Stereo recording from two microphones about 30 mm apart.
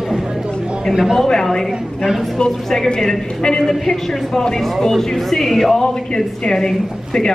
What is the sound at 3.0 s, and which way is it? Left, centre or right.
Speech, centre.